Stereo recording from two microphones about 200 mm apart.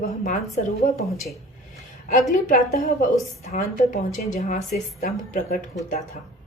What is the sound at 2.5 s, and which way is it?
A woman's voice, 45° left (ahead or behind).